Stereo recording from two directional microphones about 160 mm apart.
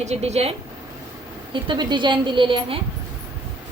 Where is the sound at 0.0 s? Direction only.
45° right (ahead or behind).